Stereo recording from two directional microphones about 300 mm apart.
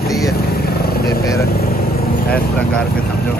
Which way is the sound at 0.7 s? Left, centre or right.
Left.